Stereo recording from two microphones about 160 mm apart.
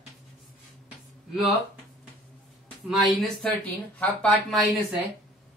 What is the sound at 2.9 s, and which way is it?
Speech, centre (ahead or behind).